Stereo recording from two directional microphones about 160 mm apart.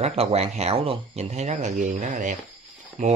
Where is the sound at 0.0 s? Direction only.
40° right (ahead or behind).